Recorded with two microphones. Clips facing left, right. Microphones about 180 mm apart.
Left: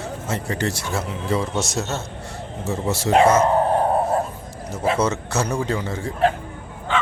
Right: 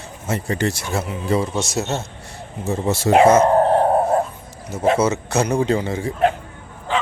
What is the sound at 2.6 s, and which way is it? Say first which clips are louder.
Speech: right 3 dB; 25° right (ahead or behind).